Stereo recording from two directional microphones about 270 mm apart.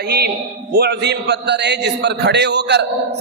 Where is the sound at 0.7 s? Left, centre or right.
Right.